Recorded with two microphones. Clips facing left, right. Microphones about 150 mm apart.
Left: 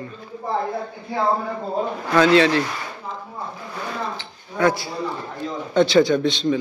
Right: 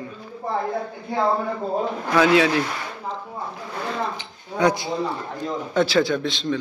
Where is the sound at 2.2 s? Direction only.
10° right (ahead or behind).